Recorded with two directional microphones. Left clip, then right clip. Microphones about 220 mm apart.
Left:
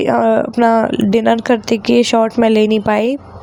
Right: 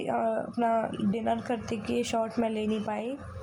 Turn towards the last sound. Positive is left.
turn(degrees=40)  # may be behind; listen again after turning